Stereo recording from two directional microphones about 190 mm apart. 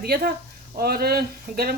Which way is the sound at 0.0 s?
55° right (ahead or behind).